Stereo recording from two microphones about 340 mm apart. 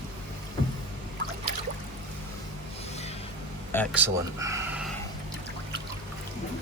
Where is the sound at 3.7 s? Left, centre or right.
Centre.